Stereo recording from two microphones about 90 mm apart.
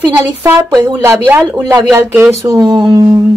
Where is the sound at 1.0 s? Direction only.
35° right (ahead or behind).